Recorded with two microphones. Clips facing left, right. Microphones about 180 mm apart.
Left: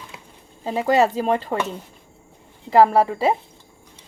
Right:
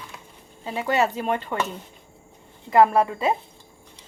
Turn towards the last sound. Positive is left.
turn(degrees=30)  # may be behind; listen again after turning